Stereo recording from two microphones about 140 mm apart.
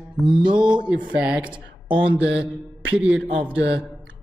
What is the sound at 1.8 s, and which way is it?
Speech, 35° right (ahead or behind).